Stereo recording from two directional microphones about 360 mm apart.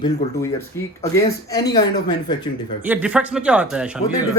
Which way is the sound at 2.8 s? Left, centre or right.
Centre.